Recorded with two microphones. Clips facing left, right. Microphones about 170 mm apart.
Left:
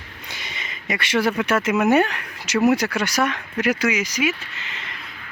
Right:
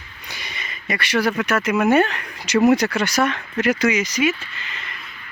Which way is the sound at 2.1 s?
5° left (ahead or behind).